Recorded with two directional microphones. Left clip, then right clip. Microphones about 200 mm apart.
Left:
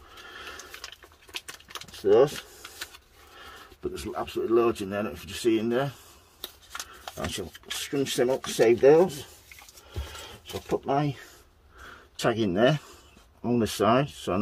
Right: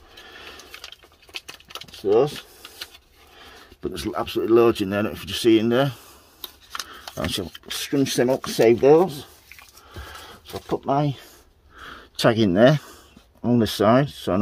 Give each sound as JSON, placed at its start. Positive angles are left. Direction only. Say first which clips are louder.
{"t": 0.3, "sound": "a sound", "louder": "even", "side_deg": -25}
{"t": 2.0, "sound": "speech", "louder": "right 1 dB", "side_deg": -20}
{"t": 3.8, "sound": "speech", "louder": "right 6 dB", "side_deg": -40}
{"t": 7.2, "sound": "speech", "louder": "right 6 dB", "side_deg": -50}
{"t": 10.9, "sound": "speech", "louder": "right 5 dB", "side_deg": -30}
{"t": 11.8, "sound": "a sound", "louder": "right 8 dB", "side_deg": -50}
{"t": 13.4, "sound": "speech", "louder": "right 5 dB", "side_deg": -35}